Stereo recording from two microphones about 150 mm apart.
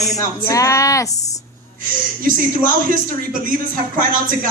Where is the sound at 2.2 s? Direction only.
65° right (ahead or behind).